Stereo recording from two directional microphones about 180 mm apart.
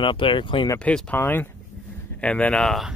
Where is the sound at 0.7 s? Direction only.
5° left (ahead or behind).